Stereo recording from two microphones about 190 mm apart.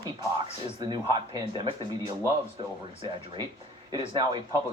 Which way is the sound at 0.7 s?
25° right (ahead or behind).